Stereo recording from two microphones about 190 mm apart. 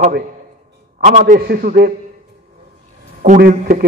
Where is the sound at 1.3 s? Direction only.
55° right (ahead or behind).